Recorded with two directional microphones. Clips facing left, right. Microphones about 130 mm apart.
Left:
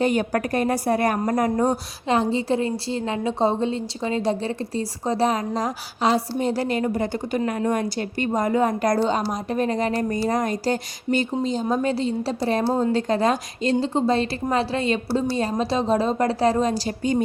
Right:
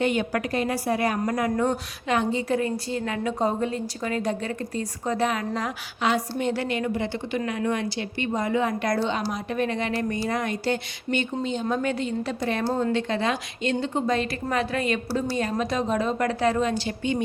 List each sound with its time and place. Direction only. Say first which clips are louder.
0.0 s a woman's voice: left 3 dB; 40° left (ahead or behind)
1.2 s a woman's voice: left 3 dB; 35° left (ahead or behind)